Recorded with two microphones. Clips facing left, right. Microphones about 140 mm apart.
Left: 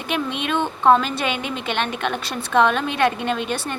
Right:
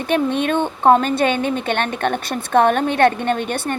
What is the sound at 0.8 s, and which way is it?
A woman's voice, 50° right (ahead or behind).